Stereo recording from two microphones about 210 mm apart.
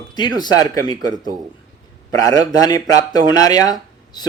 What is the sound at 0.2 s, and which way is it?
A man's voice, 20° left (ahead or behind).